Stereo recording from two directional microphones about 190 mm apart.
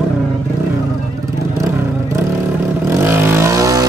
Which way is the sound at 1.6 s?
15° right (ahead or behind).